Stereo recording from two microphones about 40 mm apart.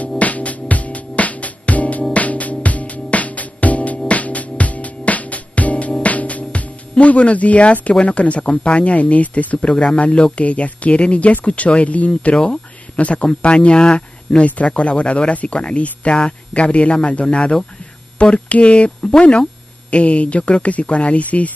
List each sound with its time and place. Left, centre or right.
0.2 s music: left
8.0 s speech: left
12.1 s speech: left